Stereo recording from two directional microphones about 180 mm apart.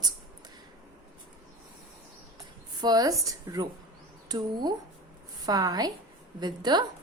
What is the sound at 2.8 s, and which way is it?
A woman's voice, 20° right (ahead or behind).